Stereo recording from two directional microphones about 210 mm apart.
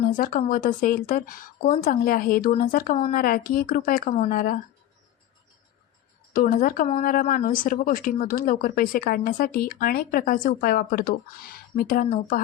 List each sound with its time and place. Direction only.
0.1 s speech: 40° left (ahead or behind)
6.3 s speech: 40° left (ahead or behind)